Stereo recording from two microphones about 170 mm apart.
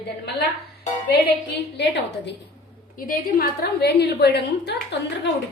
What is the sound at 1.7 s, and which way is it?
Speech, 90° left.